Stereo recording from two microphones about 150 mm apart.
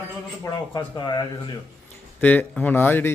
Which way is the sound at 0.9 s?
30° left (ahead or behind).